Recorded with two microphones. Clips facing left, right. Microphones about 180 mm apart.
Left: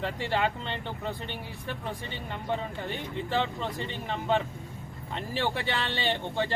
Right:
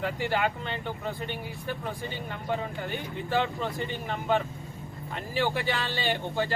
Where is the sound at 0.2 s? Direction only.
25° left (ahead or behind).